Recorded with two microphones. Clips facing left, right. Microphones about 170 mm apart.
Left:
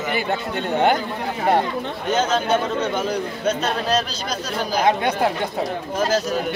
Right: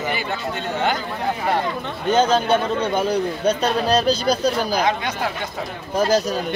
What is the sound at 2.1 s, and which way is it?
A man's voice, 30° right (ahead or behind).